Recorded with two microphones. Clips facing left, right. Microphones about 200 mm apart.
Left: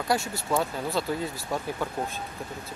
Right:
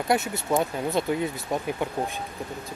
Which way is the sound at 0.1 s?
20° right (ahead or behind).